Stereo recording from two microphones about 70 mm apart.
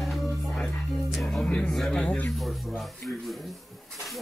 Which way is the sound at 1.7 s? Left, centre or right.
Centre.